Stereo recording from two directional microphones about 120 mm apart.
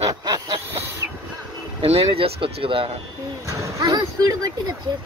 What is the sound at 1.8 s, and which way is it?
Speech, 55° right (ahead or behind).